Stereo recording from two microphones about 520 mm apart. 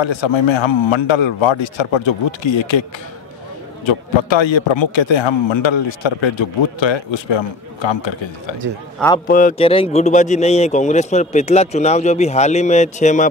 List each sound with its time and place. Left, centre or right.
0.0 s a man's voice: left
3.8 s a man's voice: left
9.0 s a man's voice: centre